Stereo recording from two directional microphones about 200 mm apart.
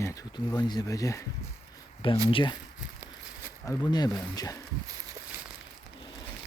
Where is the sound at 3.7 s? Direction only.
20° left (ahead or behind).